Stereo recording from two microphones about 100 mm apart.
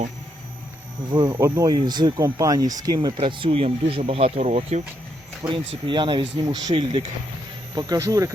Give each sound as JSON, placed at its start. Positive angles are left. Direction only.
{"t": 1.3, "sound": "speech", "side_deg": -30}
{"t": 1.6, "sound": "speech", "side_deg": -45}
{"t": 3.2, "sound": "speech", "side_deg": -60}
{"t": 5.4, "sound": "speech", "side_deg": -60}
{"t": 7.8, "sound": "speech", "side_deg": -35}